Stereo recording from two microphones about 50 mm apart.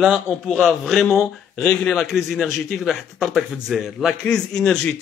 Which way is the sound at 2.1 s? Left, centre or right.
Centre.